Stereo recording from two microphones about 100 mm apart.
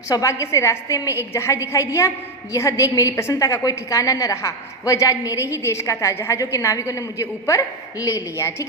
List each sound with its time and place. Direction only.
0.1 s a woman's voice: 35° left (ahead or behind)